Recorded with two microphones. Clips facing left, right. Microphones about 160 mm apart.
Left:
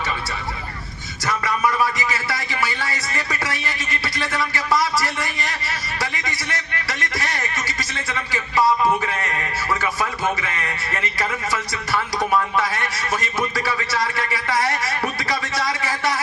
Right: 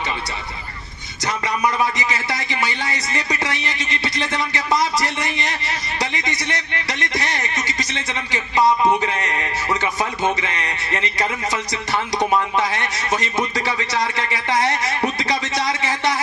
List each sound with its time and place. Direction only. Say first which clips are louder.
1.2 s speech: right 1 dB; 20° right (ahead or behind)